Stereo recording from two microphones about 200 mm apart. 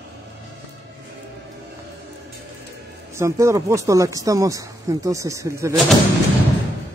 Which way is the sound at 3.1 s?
15° right (ahead or behind).